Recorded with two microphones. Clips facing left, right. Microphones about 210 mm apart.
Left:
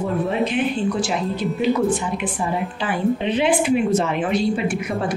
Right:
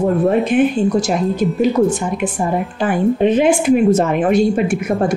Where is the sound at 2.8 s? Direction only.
50° right (ahead or behind).